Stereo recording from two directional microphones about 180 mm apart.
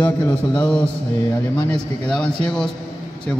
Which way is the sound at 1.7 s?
5° left (ahead or behind).